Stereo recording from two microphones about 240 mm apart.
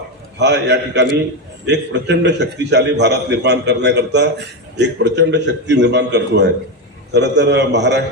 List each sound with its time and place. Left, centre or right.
0.3 s a man's voice: right